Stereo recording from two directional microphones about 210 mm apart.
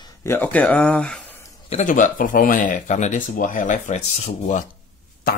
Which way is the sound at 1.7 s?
35° left (ahead or behind).